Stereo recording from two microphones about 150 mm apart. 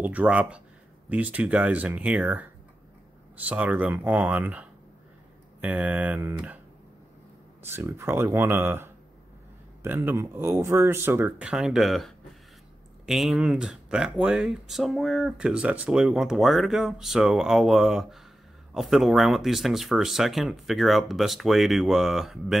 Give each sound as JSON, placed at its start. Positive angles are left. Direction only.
{"t": 0.0, "sound": "speech", "side_deg": -10}
{"t": 3.4, "sound": "speech", "side_deg": -10}
{"t": 7.6, "sound": "speech", "side_deg": -15}